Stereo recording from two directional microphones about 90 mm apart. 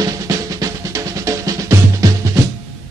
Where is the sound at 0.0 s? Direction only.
40° right (ahead or behind).